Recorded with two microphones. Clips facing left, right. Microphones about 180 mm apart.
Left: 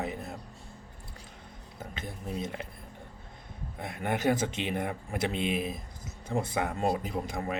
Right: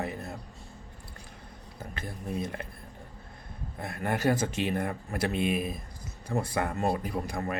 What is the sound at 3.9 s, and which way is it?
A man's voice, 20° left (ahead or behind).